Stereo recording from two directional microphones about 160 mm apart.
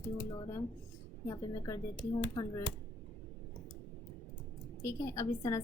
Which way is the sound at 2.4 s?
20° left (ahead or behind).